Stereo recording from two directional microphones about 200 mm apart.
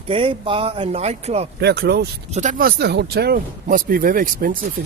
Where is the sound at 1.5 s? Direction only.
55° right (ahead or behind).